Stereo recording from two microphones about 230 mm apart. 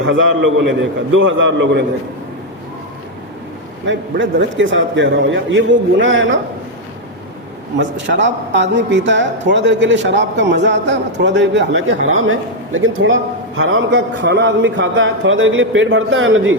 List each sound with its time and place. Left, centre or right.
0.0 s a man's voice: right
3.8 s a man's voice: right
7.8 s a man's voice: right